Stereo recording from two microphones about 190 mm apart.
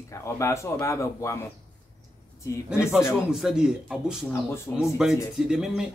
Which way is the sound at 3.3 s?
5° right (ahead or behind).